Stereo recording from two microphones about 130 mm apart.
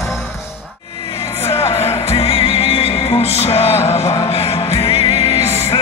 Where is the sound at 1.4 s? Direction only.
50° left (ahead or behind).